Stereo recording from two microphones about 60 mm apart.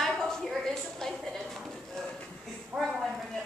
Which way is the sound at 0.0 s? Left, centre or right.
Centre.